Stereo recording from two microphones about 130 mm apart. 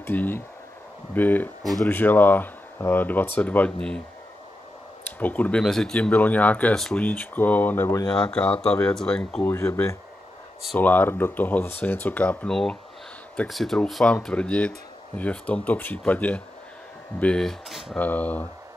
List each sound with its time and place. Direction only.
0.0 s speech: 15° left (ahead or behind)
1.6 s speech: centre (ahead or behind)
1.9 s speech: 15° left (ahead or behind)
5.2 s speech: 10° left (ahead or behind)
8.1 s speech: 5° left (ahead or behind)
9.4 s speech: 15° left (ahead or behind); by 17.9 s centre (ahead or behind)
17.9 s speech: 10° left (ahead or behind)